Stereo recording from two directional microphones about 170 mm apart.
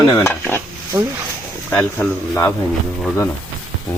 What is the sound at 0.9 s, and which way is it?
Speech, 20° right (ahead or behind).